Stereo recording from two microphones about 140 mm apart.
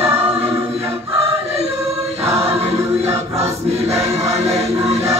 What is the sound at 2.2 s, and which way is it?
Choir, 50° right (ahead or behind).